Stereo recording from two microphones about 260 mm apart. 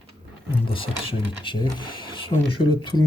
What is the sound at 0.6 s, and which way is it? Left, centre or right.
Speech, left.